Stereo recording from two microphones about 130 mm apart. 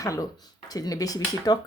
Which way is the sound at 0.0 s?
25° left (ahead or behind).